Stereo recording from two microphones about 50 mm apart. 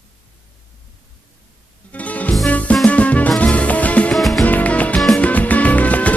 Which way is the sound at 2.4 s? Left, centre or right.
Left.